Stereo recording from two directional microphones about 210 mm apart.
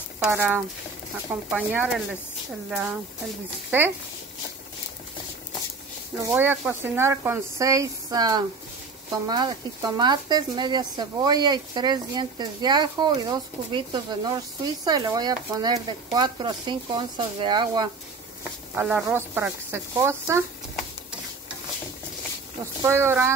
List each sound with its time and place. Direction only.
0.2 s speech: 10° right (ahead or behind)
6.2 s speech: 10° right (ahead or behind)
18.8 s speech: 5° right (ahead or behind)
22.8 s speech: 10° right (ahead or behind)